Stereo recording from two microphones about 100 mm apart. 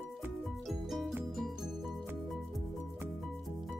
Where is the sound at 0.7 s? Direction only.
Centre (ahead or behind).